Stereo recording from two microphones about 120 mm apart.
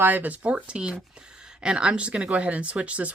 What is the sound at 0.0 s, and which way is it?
Speech, 15° right (ahead or behind).